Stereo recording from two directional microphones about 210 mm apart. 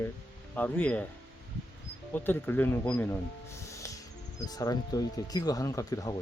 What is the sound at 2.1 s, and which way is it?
Speech, 10° left (ahead or behind).